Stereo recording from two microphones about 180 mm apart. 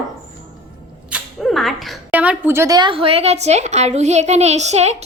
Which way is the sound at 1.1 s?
Centre (ahead or behind).